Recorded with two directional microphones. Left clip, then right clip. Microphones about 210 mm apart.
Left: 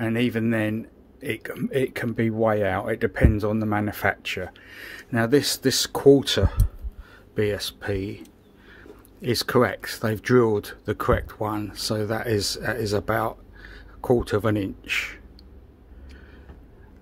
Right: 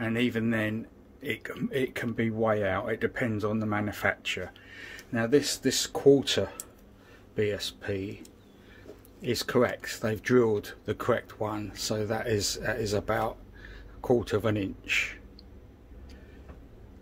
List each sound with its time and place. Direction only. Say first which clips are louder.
0.0 s speech: left 4 dB; 25° left (ahead or behind)
9.2 s speech: left 5 dB; 25° left (ahead or behind)